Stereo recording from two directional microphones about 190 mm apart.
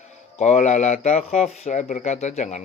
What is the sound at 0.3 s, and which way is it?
Speech, 35° left (ahead or behind).